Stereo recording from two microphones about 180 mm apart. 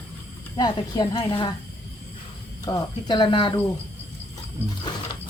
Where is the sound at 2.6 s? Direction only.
20° left (ahead or behind).